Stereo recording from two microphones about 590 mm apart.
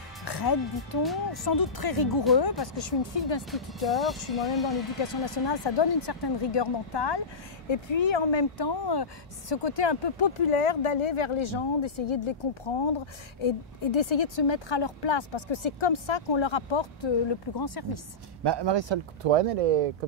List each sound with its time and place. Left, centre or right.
0.2 s speech: left
3.5 s speech: centre
5.0 s speech: left
17.6 s speech: left
18.4 s speech: right
19.3 s speech: right